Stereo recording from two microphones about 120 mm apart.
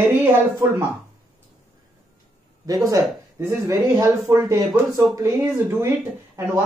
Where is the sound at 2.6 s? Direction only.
30° right (ahead or behind).